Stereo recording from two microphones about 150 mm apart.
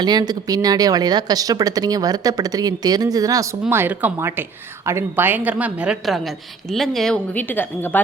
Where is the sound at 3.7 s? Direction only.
15° right (ahead or behind).